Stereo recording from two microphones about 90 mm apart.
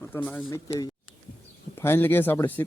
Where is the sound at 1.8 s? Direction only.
25° left (ahead or behind).